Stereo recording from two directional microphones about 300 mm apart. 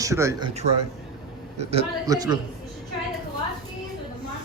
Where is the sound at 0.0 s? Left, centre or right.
Centre.